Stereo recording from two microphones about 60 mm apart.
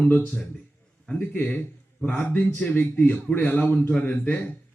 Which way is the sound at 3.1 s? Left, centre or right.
Left.